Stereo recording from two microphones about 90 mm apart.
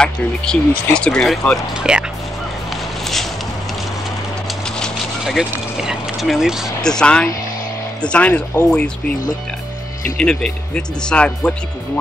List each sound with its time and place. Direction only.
0.0 s speech: 10° left (ahead or behind)
1.8 s speech: 10° right (ahead or behind)
4.6 s vehicle: 10° left (ahead or behind)
5.2 s speech: 5° right (ahead or behind)
6.8 s speech: 10° left (ahead or behind)
10.1 s speech: 10° left (ahead or behind)